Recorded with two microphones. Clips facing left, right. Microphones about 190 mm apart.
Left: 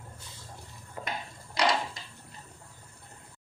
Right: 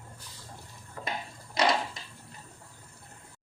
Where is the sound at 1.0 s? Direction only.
20° left (ahead or behind).